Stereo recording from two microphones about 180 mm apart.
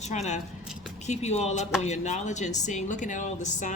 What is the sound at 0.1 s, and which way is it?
Speech, 40° left (ahead or behind).